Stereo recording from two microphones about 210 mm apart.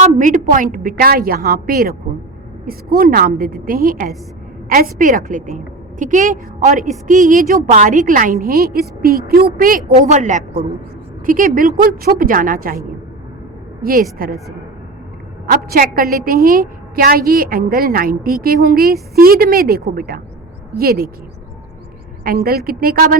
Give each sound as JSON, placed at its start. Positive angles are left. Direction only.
{"t": 0.0, "sound": "a woman's voice", "side_deg": -35}
{"t": 13.8, "sound": "a woman's voice", "side_deg": -45}
{"t": 15.4, "sound": "a woman's voice", "side_deg": -45}
{"t": 22.4, "sound": "a woman's voice", "side_deg": -45}